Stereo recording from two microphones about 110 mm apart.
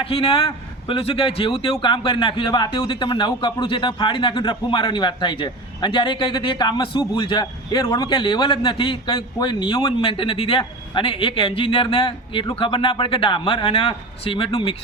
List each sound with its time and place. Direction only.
0.0 s a man's voice: 60° left (ahead or behind)